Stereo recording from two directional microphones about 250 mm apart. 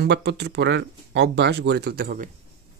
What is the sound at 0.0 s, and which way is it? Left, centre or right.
Speech, right.